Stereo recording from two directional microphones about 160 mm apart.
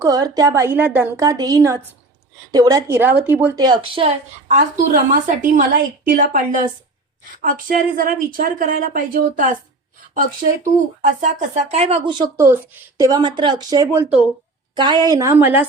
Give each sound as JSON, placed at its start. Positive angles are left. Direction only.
{"t": 0.0, "sound": "a woman's voice", "side_deg": -25}
{"t": 7.9, "sound": "speech", "side_deg": -60}
{"t": 12.4, "sound": "speech", "side_deg": -15}
{"t": 13.1, "sound": "a woman's voice", "side_deg": -25}
{"t": 13.8, "sound": "speech", "side_deg": -15}
{"t": 14.8, "sound": "a woman's voice", "side_deg": -25}